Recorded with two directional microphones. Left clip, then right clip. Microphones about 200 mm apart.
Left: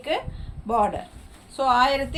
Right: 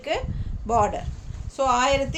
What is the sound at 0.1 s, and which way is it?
A woman's voice, 25° right (ahead or behind).